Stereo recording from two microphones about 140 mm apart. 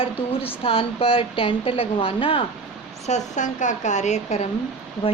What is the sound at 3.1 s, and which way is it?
Speech, 60° left (ahead or behind).